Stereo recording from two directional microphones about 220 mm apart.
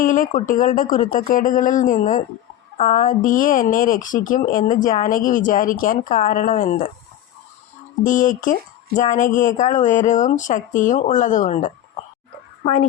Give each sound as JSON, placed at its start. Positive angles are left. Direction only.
{"t": 0.0, "sound": "speech", "side_deg": 35}
{"t": 8.0, "sound": "speech", "side_deg": 35}